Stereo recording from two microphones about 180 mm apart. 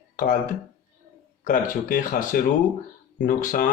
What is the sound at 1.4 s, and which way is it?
Speech, 50° left (ahead or behind).